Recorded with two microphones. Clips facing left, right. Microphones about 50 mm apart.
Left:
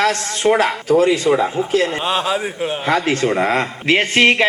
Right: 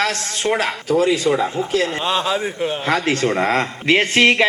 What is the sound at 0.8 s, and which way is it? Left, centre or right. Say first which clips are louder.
Speech: left 2 dB; left.